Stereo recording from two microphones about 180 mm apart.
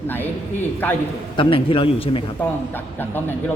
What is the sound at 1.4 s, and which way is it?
Speech, 30° left (ahead or behind).